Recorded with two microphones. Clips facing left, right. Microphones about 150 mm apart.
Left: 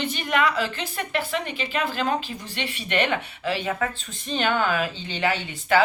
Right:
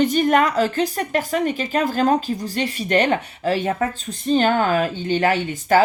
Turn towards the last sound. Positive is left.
turn(degrees=-45)  # may be behind; listen again after turning